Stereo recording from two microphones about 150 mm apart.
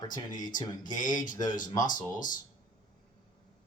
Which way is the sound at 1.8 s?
60° left (ahead or behind).